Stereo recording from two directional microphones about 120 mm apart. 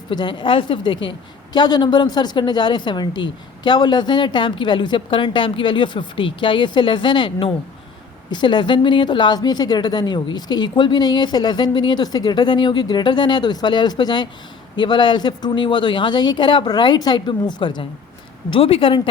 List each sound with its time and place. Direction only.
0.1 s a woman's voice: 40° left (ahead or behind)